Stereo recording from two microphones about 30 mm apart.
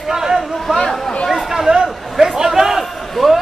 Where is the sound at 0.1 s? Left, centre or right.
Centre.